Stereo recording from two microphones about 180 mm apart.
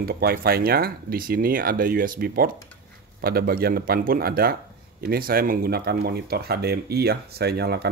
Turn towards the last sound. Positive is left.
turn(degrees=-65)  # may be behind; listen again after turning